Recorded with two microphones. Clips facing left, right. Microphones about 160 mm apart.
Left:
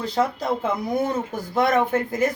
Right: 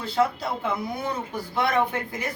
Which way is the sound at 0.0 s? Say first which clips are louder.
Left 1 dB; 40° left (ahead or behind).